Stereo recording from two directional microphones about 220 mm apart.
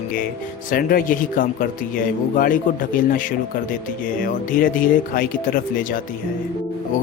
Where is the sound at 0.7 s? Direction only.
40° left (ahead or behind).